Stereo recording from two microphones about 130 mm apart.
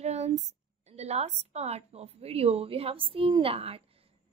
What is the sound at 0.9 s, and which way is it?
A woman's voice, 55° right (ahead or behind).